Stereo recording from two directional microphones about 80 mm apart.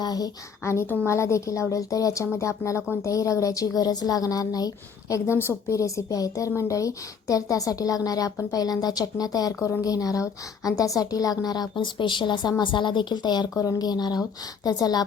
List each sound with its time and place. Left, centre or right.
0.0 s a woman's voice: left
0.6 s a woman's voice: left
13.6 s a woman's voice: left